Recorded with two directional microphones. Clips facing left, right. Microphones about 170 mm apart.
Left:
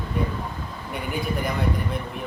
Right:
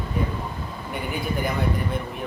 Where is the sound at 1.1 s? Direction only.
Centre (ahead or behind).